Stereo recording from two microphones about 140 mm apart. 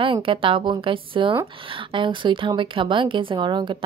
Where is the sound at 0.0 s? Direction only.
40° right (ahead or behind).